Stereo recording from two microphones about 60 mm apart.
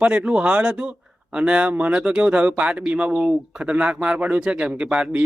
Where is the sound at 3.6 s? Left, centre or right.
Right.